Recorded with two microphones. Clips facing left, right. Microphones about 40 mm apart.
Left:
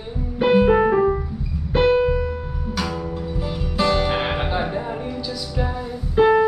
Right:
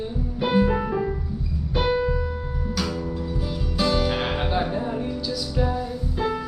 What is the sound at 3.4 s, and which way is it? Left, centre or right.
Music, left.